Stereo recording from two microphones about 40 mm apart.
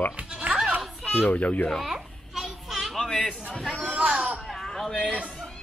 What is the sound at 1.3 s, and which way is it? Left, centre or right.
Speech, left.